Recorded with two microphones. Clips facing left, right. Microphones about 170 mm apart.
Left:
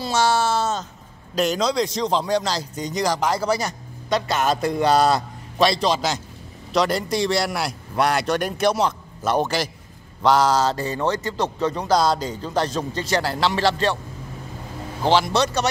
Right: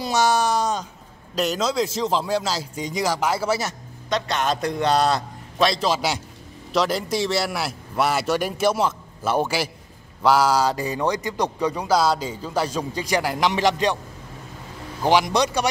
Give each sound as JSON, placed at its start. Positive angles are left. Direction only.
{"t": 0.0, "sound": "a sound", "side_deg": -15}
{"t": 1.3, "sound": "a man's voice", "side_deg": 0}
{"t": 15.0, "sound": "speech", "side_deg": -15}